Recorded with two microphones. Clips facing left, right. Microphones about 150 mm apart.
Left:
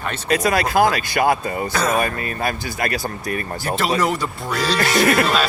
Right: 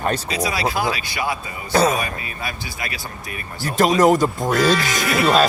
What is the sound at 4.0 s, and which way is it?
Speech, 45° right (ahead or behind).